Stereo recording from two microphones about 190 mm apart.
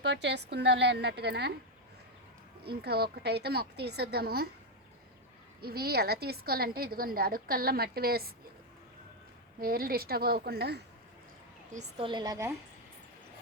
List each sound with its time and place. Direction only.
0.0 s a woman's voice: 65° right (ahead or behind)
2.6 s a woman's voice: 55° right (ahead or behind)
5.5 s a woman's voice: 55° right (ahead or behind)
9.6 s a woman's voice: 50° right (ahead or behind)
11.7 s a woman's voice: 35° right (ahead or behind); by 12.5 s 15° right (ahead or behind)